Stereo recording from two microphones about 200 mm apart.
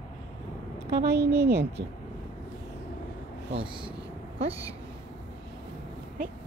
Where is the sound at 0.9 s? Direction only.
15° right (ahead or behind).